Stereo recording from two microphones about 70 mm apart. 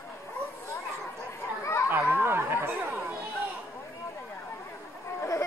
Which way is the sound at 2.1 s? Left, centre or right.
Right.